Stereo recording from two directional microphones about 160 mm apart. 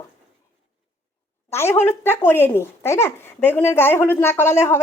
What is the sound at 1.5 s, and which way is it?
A woman's voice, 15° left (ahead or behind).